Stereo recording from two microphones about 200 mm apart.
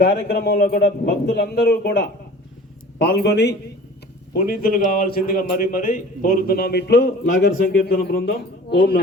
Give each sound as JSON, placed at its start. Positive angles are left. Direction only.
{"t": 0.0, "sound": "a man's voice", "side_deg": 50}